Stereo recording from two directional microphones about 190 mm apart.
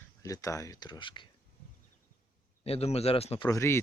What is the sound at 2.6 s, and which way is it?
Speech, 30° left (ahead or behind).